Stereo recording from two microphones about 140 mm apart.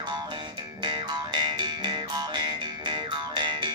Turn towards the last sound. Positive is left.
turn(degrees=-35)  # may be behind; listen again after turning